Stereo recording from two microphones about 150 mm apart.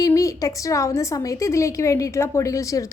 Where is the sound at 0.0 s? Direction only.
20° left (ahead or behind).